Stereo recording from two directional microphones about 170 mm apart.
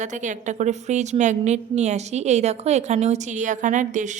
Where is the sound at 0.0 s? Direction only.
45° right (ahead or behind).